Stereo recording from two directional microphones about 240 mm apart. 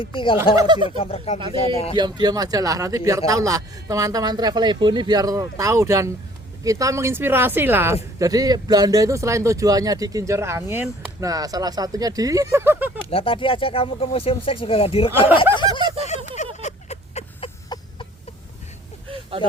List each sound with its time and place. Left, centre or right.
0.0 s speech: left
0.5 s speech: centre
0.9 s speech: left
2.0 s speech: centre
13.1 s speech: left
15.7 s a sound: left